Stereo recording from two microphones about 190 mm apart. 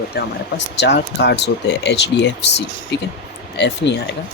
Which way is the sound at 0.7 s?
65° left (ahead or behind).